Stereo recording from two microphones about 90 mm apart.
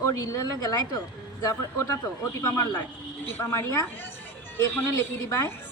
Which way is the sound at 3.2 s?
25° left (ahead or behind).